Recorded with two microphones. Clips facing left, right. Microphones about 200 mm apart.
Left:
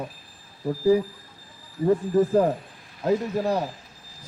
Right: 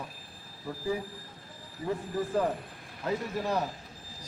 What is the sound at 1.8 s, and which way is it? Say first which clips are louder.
Speech: left 12 dB; 40° left (ahead or behind).